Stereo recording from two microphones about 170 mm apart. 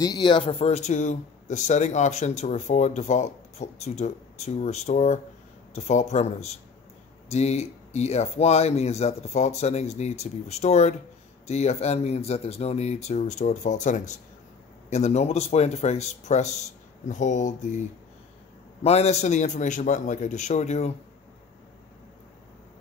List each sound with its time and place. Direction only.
0.0 s a man's voice: 25° left (ahead or behind); by 20.9 s 40° left (ahead or behind)